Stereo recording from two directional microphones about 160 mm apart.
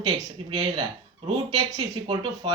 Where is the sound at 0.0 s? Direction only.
25° right (ahead or behind).